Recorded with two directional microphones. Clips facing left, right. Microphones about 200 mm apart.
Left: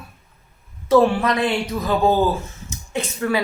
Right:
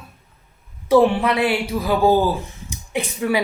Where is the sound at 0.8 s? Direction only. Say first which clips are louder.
Right 1 dB; 15° right (ahead or behind).